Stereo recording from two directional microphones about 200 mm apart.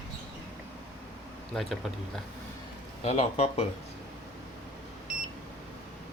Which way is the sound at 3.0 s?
30° left (ahead or behind).